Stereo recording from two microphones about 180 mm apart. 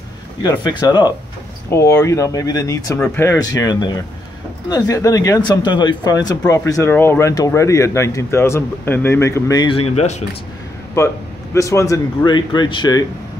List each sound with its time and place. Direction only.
0.4 s speech: 20° left (ahead or behind)
11.0 s speech: 15° left (ahead or behind)